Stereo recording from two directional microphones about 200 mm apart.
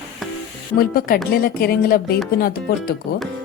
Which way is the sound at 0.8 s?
50° left (ahead or behind).